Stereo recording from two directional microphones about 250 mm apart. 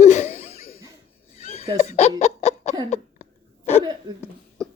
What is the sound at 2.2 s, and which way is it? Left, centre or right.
Laughter, left.